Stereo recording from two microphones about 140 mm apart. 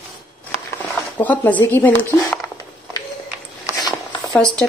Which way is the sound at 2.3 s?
25° left (ahead or behind).